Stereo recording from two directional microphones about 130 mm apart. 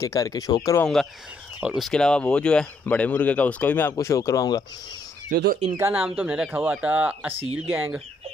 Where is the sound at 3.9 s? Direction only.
25° left (ahead or behind).